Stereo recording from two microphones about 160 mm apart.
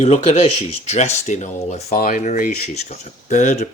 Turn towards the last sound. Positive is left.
turn(degrees=50)  # may be behind; listen again after turning